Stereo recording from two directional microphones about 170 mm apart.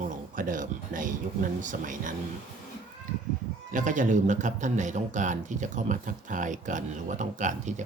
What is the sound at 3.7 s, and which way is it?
A man's voice, 50° right (ahead or behind).